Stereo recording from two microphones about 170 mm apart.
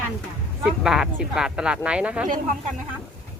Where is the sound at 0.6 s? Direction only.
5° right (ahead or behind).